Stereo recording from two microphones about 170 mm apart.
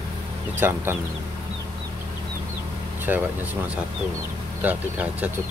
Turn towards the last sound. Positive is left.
turn(degrees=-10)  # may be behind; listen again after turning